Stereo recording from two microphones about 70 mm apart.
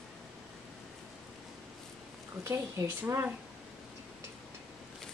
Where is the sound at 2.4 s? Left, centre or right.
Right.